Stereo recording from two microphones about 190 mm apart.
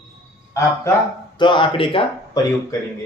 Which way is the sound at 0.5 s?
15° left (ahead or behind).